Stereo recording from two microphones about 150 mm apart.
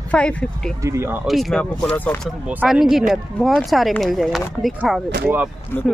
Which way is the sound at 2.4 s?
10° right (ahead or behind).